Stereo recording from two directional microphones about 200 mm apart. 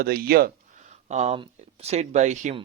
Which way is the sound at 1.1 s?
30° right (ahead or behind).